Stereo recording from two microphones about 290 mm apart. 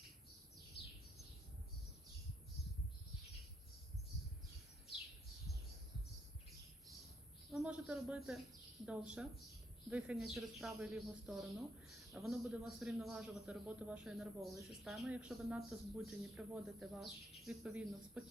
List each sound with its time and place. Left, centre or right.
0.8 s bird: left
7.5 s a man's voice: centre